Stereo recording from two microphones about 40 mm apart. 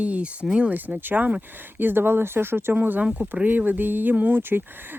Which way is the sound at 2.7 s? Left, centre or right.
Right.